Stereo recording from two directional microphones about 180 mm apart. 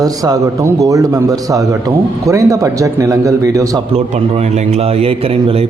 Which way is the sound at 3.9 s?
35° right (ahead or behind).